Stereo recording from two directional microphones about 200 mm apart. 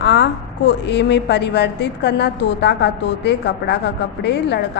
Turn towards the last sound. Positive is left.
turn(degrees=60)  # may be behind; listen again after turning